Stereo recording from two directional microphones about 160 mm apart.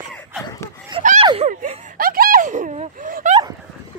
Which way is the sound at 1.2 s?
35° right (ahead or behind).